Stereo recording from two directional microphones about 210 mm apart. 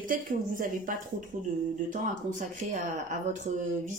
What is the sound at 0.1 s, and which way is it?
Speech, 40° right (ahead or behind).